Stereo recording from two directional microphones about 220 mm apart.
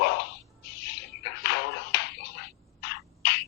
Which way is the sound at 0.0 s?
50° left (ahead or behind).